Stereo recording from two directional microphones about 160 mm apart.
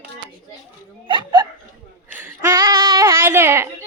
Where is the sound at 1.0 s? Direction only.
30° right (ahead or behind).